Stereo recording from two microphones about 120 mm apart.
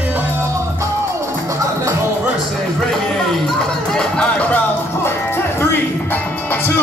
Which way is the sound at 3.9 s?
5° left (ahead or behind).